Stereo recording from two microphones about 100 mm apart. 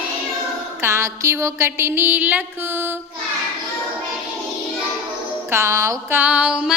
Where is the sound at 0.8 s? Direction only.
30° right (ahead or behind).